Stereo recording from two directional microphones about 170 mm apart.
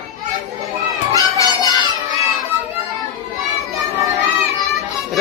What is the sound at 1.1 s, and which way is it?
Children playing, 20° left (ahead or behind).